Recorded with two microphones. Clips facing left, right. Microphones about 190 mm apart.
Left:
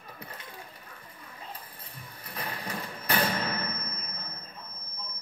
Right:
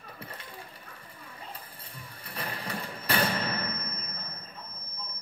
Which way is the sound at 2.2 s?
30° right (ahead or behind).